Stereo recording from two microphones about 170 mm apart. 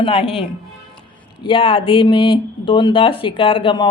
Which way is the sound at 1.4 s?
30° left (ahead or behind).